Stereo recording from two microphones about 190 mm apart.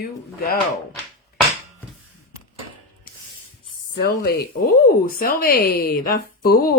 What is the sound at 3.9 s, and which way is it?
Speech, 55° left (ahead or behind).